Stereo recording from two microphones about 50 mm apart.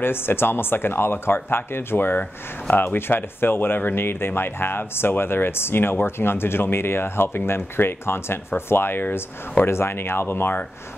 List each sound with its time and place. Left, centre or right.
0.0 s speech: left